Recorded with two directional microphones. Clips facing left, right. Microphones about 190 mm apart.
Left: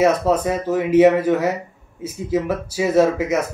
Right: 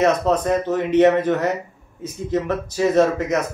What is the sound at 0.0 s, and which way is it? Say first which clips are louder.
Speech: left 1 dB; 5° left (ahead or behind).